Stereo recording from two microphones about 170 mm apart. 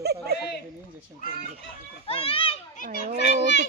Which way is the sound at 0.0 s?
70° right (ahead or behind).